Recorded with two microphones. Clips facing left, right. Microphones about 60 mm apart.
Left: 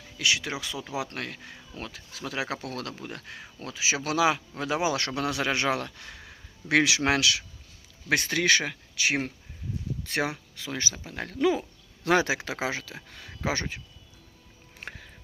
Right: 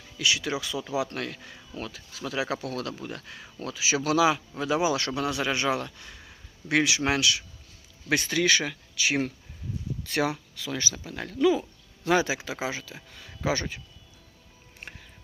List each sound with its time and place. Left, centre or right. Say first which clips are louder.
0.2 s speech: right 1 dB; left
3.8 s speech: right 2 dB; left
8.1 s speech: even; left
11.3 s speech: right 2 dB; left
12.0 s speech: even; left
13.5 s speech: right 2 dB; left